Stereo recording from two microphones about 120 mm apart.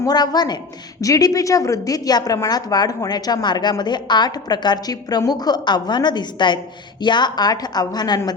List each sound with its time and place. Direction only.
0.0 s a woman's voice: 35° left (ahead or behind)